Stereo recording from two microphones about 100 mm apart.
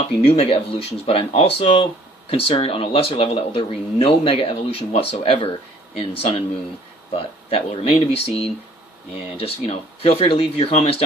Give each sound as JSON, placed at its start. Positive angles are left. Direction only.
{"t": 0.3, "sound": "speech", "side_deg": 70}
{"t": 6.0, "sound": "speech", "side_deg": 75}